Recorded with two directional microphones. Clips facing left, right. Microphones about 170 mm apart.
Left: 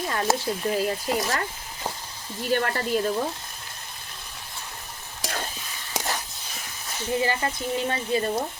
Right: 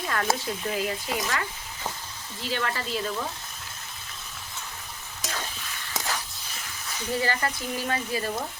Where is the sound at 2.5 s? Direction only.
50° left (ahead or behind).